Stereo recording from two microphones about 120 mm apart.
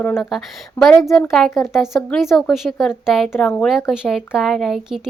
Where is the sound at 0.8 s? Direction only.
15° left (ahead or behind).